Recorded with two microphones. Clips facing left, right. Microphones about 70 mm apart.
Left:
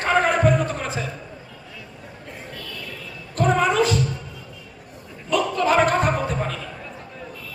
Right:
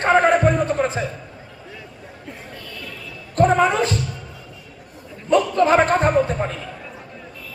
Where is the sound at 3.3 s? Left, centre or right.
Right.